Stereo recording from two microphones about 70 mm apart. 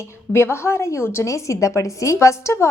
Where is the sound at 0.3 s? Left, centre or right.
Left.